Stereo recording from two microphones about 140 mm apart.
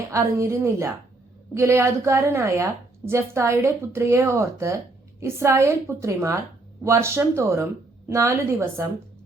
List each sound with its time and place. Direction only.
0.1 s a woman's voice: 20° right (ahead or behind)